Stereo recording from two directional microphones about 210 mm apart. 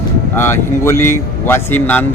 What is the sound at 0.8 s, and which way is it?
Speech, 10° left (ahead or behind).